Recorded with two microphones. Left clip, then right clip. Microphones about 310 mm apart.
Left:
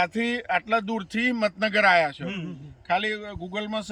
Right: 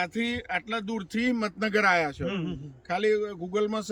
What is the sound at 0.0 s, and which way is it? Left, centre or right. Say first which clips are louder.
Speech: left 5 dB; centre.